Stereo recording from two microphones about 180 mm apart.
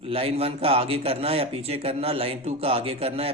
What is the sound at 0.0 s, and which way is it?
A man's voice, 30° right (ahead or behind).